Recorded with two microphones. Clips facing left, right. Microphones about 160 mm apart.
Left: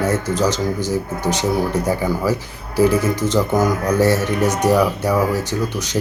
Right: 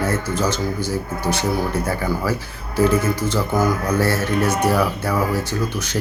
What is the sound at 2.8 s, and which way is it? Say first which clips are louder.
Speech: left 2 dB; 15° left (ahead or behind).